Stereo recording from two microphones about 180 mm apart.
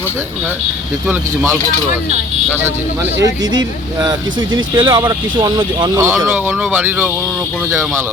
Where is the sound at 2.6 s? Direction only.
15° right (ahead or behind).